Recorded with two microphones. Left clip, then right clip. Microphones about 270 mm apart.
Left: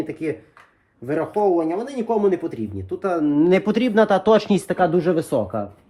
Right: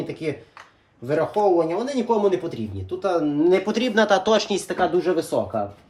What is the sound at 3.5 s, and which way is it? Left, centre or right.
Speech, left.